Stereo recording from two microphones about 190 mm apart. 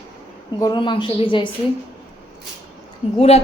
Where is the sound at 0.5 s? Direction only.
20° left (ahead or behind).